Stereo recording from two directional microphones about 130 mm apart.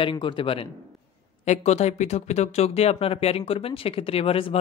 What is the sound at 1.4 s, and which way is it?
Speech, 60° left (ahead or behind).